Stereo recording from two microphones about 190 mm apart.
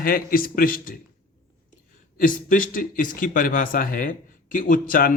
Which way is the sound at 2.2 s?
45° left (ahead or behind).